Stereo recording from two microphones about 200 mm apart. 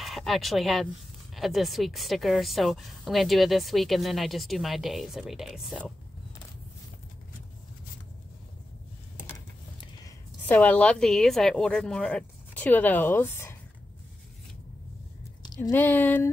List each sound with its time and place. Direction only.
0.0 s a woman's voice: centre (ahead or behind)
10.4 s a woman's voice: 10° left (ahead or behind)
15.4 s a sound: 20° left (ahead or behind)
15.7 s speech: 10° left (ahead or behind)